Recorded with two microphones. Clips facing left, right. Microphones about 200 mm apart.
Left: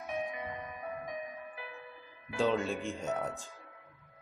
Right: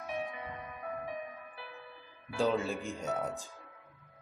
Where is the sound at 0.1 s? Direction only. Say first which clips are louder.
Left 2 dB; 20° left (ahead or behind).